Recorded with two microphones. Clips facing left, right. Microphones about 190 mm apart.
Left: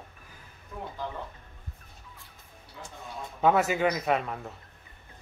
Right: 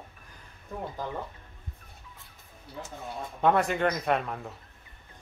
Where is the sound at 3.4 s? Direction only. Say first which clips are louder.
Left 1 dB; 5° left (ahead or behind).